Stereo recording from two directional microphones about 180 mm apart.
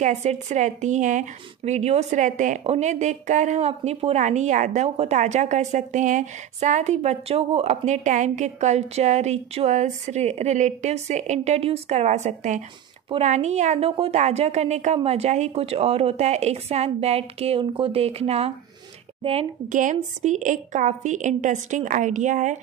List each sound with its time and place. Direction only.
0.0 s a woman's voice: 40° right (ahead or behind)